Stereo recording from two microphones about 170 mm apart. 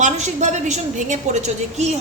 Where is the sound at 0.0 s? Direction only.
45° right (ahead or behind).